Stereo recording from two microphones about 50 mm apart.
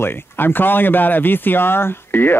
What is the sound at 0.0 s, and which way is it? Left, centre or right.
Speech, left.